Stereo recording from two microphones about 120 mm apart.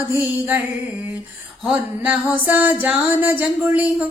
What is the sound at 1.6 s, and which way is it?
Music, 5° right (ahead or behind).